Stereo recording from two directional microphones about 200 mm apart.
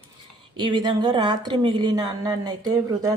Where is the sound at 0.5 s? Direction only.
25° right (ahead or behind).